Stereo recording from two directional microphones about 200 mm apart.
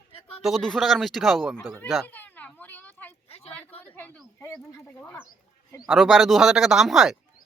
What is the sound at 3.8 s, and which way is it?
Speech, 10° left (ahead or behind).